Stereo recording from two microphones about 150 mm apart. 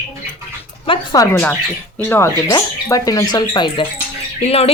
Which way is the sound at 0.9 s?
25° left (ahead or behind).